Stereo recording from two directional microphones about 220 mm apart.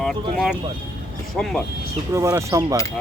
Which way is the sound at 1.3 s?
5° left (ahead or behind).